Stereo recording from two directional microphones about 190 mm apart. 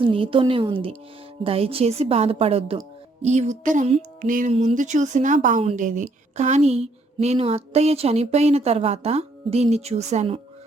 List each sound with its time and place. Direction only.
0.0 s a woman's voice: 30° right (ahead or behind)